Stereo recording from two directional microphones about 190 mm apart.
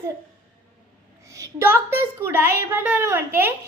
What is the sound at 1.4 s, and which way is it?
A woman's voice, 10° right (ahead or behind).